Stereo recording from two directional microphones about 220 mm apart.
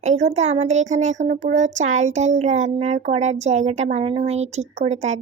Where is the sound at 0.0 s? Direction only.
30° right (ahead or behind).